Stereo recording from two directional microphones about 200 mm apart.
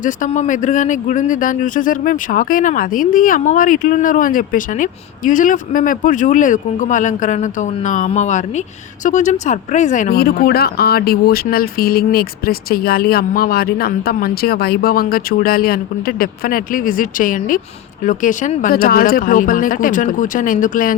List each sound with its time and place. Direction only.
0.0 s speech: 40° left (ahead or behind)